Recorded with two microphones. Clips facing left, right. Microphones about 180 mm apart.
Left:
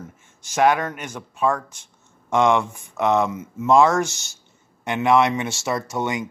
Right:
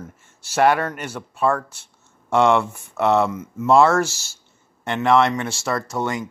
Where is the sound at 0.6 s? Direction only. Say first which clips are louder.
Right 1 dB; 10° left (ahead or behind).